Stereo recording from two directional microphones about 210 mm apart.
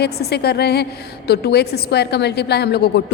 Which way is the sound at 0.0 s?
50° left (ahead or behind).